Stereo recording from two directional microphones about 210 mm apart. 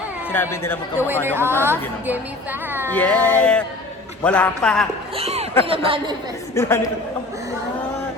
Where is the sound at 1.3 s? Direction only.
10° right (ahead or behind).